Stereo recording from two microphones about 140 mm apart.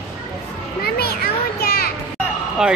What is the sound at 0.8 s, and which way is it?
Children playing, 90° left.